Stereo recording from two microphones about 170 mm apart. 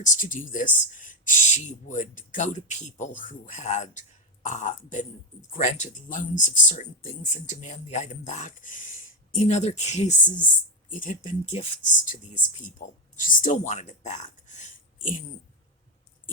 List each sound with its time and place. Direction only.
0.0 s speech: 50° left (ahead or behind)